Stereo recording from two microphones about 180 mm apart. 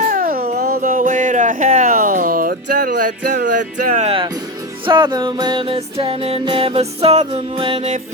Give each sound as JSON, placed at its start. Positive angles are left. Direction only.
{"t": 0.1, "sound": "music", "side_deg": -55}
{"t": 4.9, "sound": "music", "side_deg": -25}